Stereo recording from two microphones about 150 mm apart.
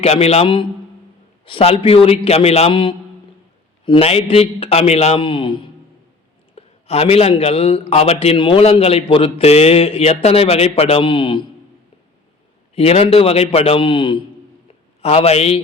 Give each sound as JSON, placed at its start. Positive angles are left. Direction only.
{"t": 0.0, "sound": "a man's voice", "side_deg": 45}
{"t": 12.7, "sound": "a man's voice", "side_deg": 40}